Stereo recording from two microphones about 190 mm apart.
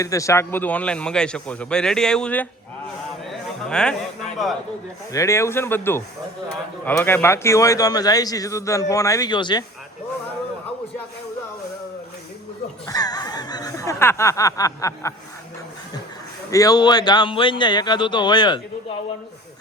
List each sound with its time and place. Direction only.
0.0 s a man's voice: 15° left (ahead or behind)
3.2 s a sound: 5° left (ahead or behind)
5.1 s a man's voice: 15° left (ahead or behind)
12.9 s snicker: 20° left (ahead or behind)
16.5 s speech: 20° left (ahead or behind)